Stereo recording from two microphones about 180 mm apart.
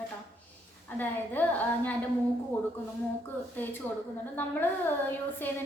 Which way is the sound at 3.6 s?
10° left (ahead or behind).